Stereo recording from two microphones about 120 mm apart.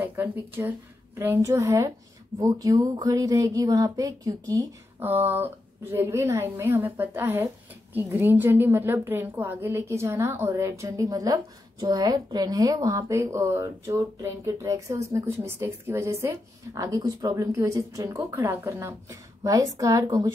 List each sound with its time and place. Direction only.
0.0 s a woman's voice: 15° right (ahead or behind)
5.0 s a woman's voice: 15° right (ahead or behind); by 20.3 s 30° right (ahead or behind)